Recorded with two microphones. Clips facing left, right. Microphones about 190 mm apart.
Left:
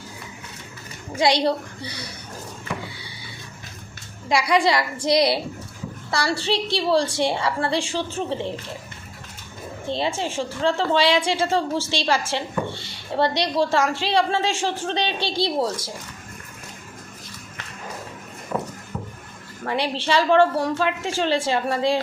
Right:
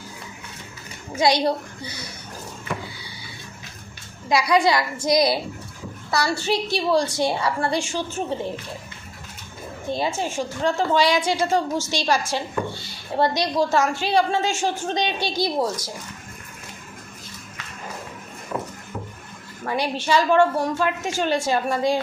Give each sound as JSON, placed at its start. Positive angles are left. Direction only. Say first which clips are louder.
{"t": 1.1, "sound": "a woman's voice", "louder": "even", "side_deg": 30}
{"t": 4.3, "sound": "a woman's voice", "louder": "right 1 dB", "side_deg": 30}
{"t": 9.8, "sound": "a woman's voice", "louder": "even", "side_deg": 25}
{"t": 19.6, "sound": "a woman's voice", "louder": "even", "side_deg": 30}